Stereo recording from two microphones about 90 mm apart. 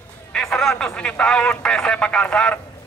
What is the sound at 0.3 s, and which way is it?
Speech, 5° left (ahead or behind).